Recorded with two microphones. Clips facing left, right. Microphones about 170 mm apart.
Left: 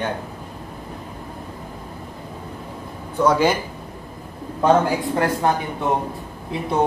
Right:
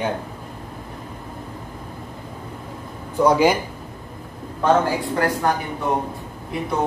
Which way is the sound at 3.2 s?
15° right (ahead or behind).